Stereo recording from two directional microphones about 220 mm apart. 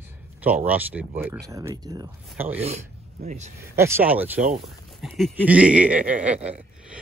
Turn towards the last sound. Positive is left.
turn(degrees=-5)  # may be behind; listen again after turning